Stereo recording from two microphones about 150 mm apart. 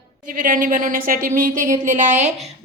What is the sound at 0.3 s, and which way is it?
A woman's voice, 65° right (ahead or behind).